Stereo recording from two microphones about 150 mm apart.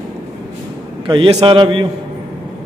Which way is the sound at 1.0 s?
35° right (ahead or behind).